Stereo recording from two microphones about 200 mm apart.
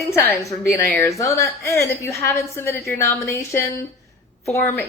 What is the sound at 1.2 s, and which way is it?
A woman's voice, 15° left (ahead or behind).